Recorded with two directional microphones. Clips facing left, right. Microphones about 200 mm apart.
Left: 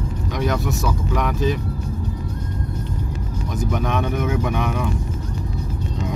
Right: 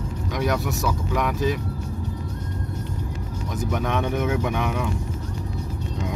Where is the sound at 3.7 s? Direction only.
20° right (ahead or behind).